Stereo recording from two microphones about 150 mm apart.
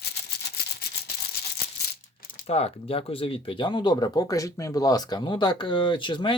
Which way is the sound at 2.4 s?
45° left (ahead or behind).